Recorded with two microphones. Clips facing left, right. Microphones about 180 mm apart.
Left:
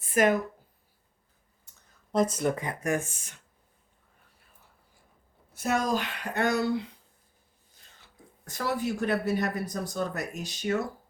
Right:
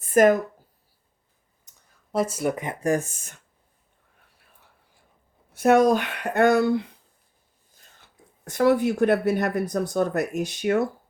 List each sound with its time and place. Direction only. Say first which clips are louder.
0.0 s a sound: right 7 dB; 45° right (ahead or behind)
1.7 s a sound: right 1 dB; 15° right (ahead or behind)
2.1 s speech: right 1 dB; 10° right (ahead or behind)
2.8 s speech: right 6 dB; 40° right (ahead or behind)
5.5 s a woman's voice: right 10 dB; 60° right (ahead or behind)
8.4 s a woman's voice: right 10 dB; 55° right (ahead or behind)